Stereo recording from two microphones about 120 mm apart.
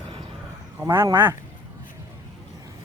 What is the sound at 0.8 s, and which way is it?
Speech, 20° right (ahead or behind).